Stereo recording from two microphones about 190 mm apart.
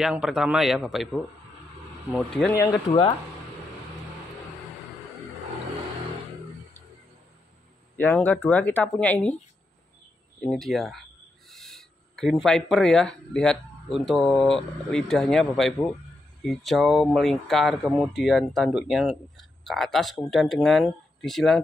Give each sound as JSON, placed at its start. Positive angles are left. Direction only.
{"t": 0.0, "sound": "speech", "side_deg": 0}
{"t": 2.5, "sound": "speech", "side_deg": 15}
{"t": 8.0, "sound": "speech", "side_deg": 10}
{"t": 10.4, "sound": "speech", "side_deg": 5}